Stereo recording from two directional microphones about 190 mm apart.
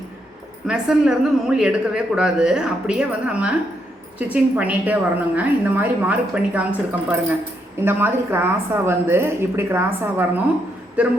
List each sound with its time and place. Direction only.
0.7 s a woman's voice: 5° right (ahead or behind)